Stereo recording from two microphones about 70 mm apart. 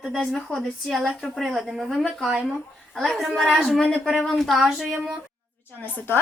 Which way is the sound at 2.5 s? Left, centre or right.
Centre.